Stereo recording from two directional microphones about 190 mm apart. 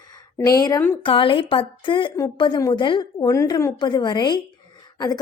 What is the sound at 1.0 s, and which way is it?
A woman's voice, 25° left (ahead or behind).